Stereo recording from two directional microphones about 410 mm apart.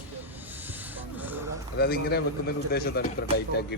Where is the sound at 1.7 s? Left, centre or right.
Left.